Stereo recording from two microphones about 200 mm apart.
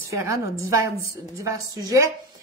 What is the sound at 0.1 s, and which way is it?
A woman's voice, 15° right (ahead or behind).